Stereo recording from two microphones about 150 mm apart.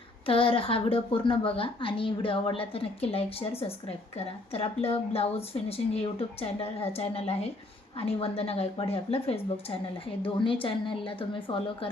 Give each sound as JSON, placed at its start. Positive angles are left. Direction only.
{"t": 0.3, "sound": "a woman's voice", "side_deg": 35}